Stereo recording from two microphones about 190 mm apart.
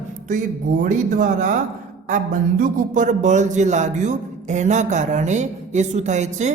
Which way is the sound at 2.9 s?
40° right (ahead or behind).